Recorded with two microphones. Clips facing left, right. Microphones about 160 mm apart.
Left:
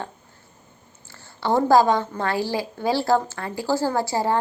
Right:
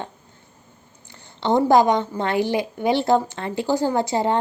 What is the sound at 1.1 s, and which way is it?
A woman's voice, 20° right (ahead or behind).